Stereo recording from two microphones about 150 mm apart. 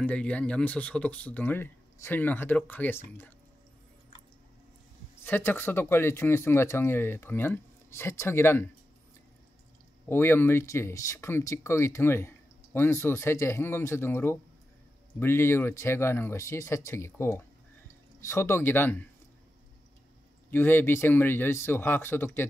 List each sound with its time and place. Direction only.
0.0 s speech: 10° left (ahead or behind)
5.2 s speech: 15° left (ahead or behind)
10.0 s speech: 15° left (ahead or behind)
20.5 s speech: 15° left (ahead or behind)